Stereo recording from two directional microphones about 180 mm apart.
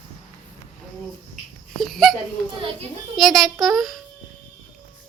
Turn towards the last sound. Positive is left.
turn(degrees=0)  # may be behind; listen again after turning